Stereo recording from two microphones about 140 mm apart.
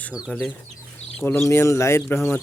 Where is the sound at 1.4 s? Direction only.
20° left (ahead or behind).